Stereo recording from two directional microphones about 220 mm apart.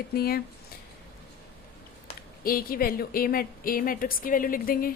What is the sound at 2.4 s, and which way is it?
A woman's voice, 40° left (ahead or behind).